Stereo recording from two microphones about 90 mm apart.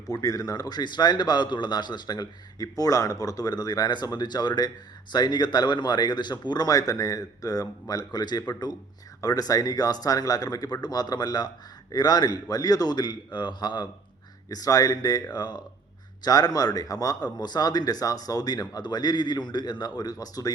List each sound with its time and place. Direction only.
0.1 s speech: 45° left (ahead or behind)
14.5 s speech: 40° left (ahead or behind)